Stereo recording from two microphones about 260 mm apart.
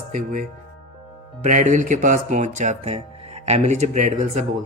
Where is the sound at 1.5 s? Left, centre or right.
Right.